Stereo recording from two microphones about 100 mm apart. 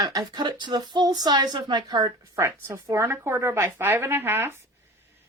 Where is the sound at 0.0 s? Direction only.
40° right (ahead or behind).